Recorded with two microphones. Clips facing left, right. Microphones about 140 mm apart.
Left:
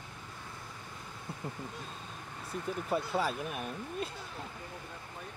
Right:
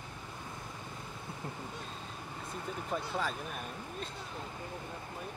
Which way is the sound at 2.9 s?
5° left (ahead or behind).